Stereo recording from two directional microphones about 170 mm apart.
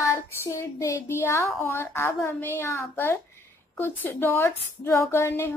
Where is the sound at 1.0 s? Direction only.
15° left (ahead or behind).